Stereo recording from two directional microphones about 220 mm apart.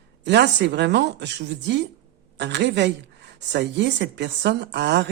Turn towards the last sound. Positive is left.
turn(degrees=-50)  # may be behind; listen again after turning